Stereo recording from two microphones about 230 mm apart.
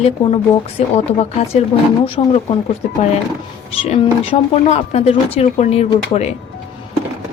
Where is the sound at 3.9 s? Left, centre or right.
Left.